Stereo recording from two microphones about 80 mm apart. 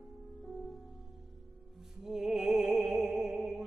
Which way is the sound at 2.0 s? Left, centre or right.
Centre.